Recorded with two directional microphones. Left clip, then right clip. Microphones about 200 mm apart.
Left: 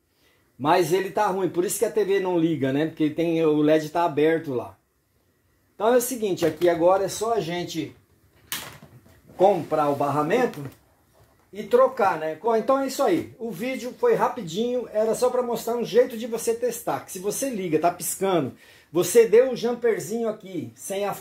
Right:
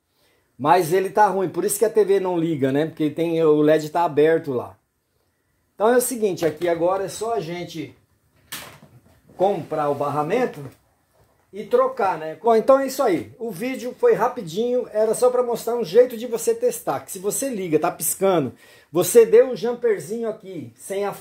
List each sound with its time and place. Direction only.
0.6 s speech: 50° right (ahead or behind)
5.8 s speech: 45° right (ahead or behind); by 7.3 s 25° right (ahead or behind)
9.4 s speech: 30° right (ahead or behind)
11.7 s speech: 30° right (ahead or behind)
12.4 s speech: 55° right (ahead or behind)
19.5 s speech: 20° right (ahead or behind)